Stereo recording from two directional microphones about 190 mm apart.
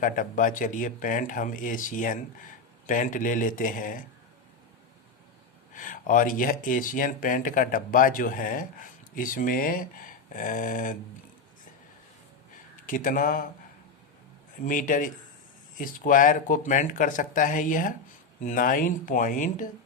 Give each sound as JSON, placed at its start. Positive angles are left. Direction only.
{"t": 0.0, "sound": "speech", "side_deg": 45}
{"t": 5.7, "sound": "speech", "side_deg": 45}
{"t": 12.8, "sound": "speech", "side_deg": 45}
{"t": 14.6, "sound": "speech", "side_deg": 45}